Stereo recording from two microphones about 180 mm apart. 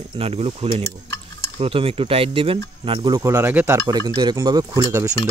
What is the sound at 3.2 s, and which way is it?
Speech, 15° right (ahead or behind).